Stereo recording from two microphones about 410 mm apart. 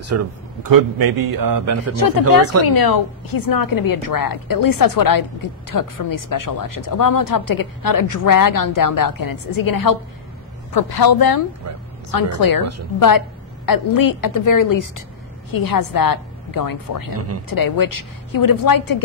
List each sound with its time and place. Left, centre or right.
0.0 s speech: right
2.0 s a woman's voice: left
13.7 s a woman's voice: left